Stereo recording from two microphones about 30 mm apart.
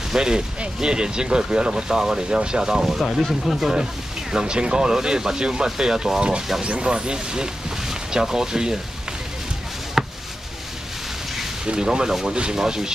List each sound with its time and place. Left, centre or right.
0.1 s speech: right
3.1 s speech: centre
4.3 s speech: right
10.0 s a sound: centre
11.6 s speech: right
12.3 s speech: right